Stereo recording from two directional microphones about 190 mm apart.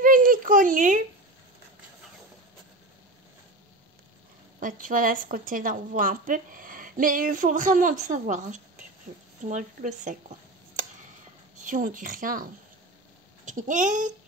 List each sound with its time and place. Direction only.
0.0 s a sound: 45° right (ahead or behind)
4.6 s a woman's voice: 45° right (ahead or behind)
11.6 s a woman's voice: 45° right (ahead or behind)
13.5 s speech: 40° right (ahead or behind)